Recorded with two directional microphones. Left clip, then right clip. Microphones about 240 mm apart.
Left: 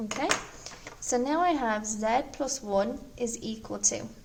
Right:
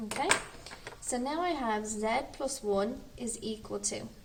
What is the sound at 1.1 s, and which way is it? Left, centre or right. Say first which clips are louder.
A woman's voice: left 7 dB; left.